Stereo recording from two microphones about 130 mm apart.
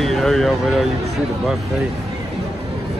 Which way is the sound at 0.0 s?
Centre (ahead or behind).